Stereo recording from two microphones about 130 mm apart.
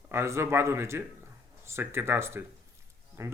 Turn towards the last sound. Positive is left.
turn(degrees=-20)  # may be behind; listen again after turning